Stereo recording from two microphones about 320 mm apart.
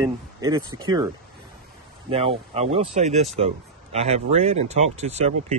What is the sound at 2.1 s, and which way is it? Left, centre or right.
Speech, centre.